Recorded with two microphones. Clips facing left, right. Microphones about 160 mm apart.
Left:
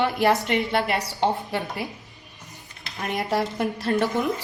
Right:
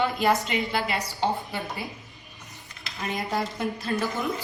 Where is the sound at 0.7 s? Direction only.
60° left (ahead or behind).